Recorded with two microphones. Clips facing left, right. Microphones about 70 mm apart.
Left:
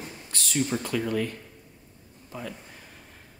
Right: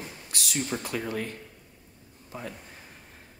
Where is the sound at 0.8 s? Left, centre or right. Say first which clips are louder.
Left 4 dB; right.